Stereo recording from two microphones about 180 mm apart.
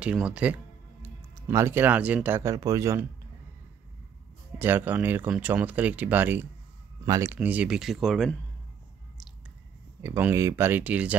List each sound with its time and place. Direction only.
0.0 s speech: 5° right (ahead or behind)
4.6 s speech: 10° right (ahead or behind)
10.0 s speech: 15° right (ahead or behind)